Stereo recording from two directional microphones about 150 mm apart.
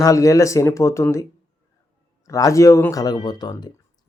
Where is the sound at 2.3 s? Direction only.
20° left (ahead or behind).